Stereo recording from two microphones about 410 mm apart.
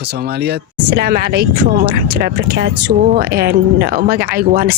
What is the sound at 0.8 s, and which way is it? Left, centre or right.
Speech, right.